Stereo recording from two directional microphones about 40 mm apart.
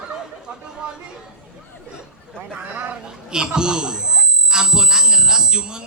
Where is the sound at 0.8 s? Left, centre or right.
Right.